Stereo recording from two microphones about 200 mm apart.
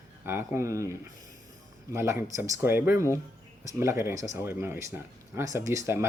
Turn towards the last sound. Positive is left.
turn(degrees=-15)  # may be behind; listen again after turning